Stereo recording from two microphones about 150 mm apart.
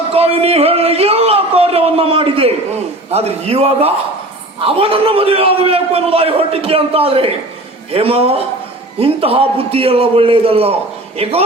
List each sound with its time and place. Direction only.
0.1 s a man's voice: 40° right (ahead or behind)